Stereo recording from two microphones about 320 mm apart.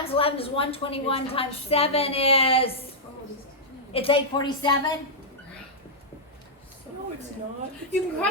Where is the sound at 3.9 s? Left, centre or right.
Centre.